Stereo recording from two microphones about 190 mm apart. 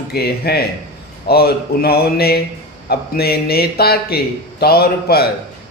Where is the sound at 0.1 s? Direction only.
55° left (ahead or behind).